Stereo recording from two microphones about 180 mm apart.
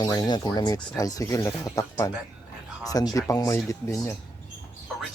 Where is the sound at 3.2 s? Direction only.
20° left (ahead or behind).